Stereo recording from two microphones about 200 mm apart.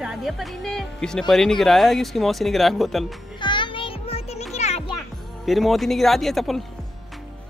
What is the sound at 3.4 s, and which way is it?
Music, 25° left (ahead or behind).